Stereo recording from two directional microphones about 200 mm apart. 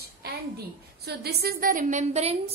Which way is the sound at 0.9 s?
55° right (ahead or behind).